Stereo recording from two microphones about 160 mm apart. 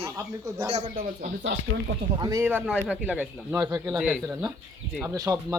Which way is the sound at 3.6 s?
20° right (ahead or behind).